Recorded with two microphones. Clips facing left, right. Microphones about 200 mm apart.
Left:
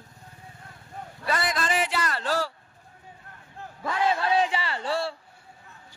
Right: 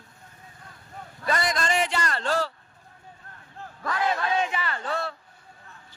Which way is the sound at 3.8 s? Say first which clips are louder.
Left 2 dB; 30° left (ahead or behind).